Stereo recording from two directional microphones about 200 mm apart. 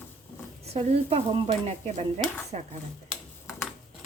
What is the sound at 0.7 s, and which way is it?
Speech, 30° right (ahead or behind).